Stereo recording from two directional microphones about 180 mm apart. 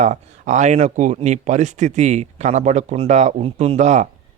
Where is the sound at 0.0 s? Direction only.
40° right (ahead or behind).